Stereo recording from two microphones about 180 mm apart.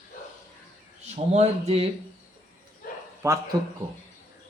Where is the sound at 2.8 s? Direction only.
50° left (ahead or behind).